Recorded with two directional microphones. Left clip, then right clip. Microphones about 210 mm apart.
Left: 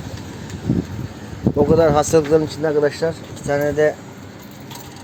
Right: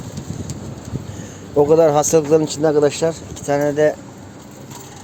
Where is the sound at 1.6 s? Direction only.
10° right (ahead or behind).